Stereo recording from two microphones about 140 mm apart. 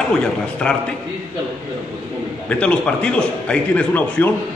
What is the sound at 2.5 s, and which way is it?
A man's voice, 10° left (ahead or behind).